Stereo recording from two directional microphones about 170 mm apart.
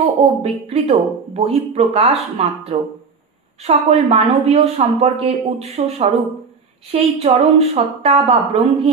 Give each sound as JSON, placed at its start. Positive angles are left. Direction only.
{"t": 0.4, "sound": "a woman's voice", "side_deg": -35}